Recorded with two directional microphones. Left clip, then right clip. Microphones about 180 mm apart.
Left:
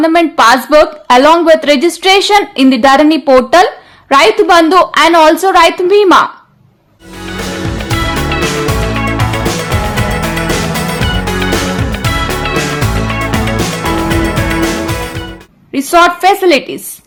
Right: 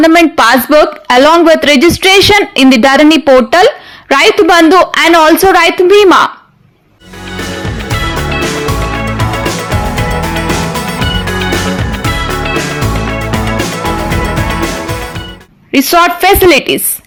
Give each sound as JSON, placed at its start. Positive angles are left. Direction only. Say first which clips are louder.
{"t": 0.0, "sound": "a woman's voice", "louder": "right 2 dB", "side_deg": -20}
{"t": 7.3, "sound": "music", "louder": "even", "side_deg": 0}
{"t": 15.7, "sound": "a woman's voice", "louder": "right 1 dB", "side_deg": -25}